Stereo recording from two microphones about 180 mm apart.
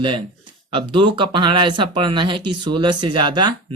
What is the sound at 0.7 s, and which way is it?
Speech, 30° right (ahead or behind).